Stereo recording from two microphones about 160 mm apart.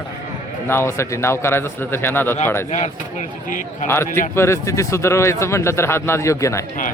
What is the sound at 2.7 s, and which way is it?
Speech, 45° left (ahead or behind).